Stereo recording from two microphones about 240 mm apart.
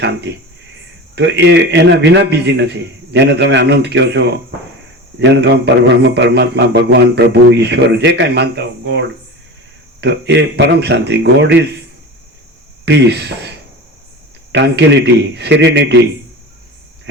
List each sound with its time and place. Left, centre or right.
0.0 s a man's voice: right
12.8 s a man's voice: right